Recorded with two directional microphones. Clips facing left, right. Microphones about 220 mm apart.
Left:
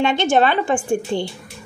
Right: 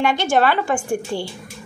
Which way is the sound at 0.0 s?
20° left (ahead or behind).